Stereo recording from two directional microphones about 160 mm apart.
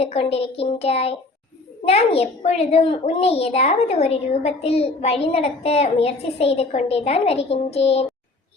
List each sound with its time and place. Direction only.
0.0 s a child's voice: 40° left (ahead or behind)